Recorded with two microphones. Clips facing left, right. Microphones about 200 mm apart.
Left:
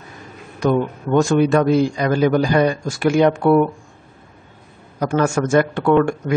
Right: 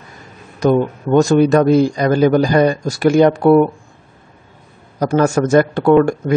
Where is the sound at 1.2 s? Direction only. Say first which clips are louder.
Right 4 dB; 40° right (ahead or behind).